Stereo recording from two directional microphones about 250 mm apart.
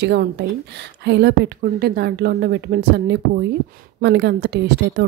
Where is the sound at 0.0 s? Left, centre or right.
Right.